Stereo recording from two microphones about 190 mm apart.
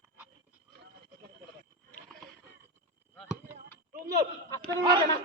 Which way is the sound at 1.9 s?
5° left (ahead or behind).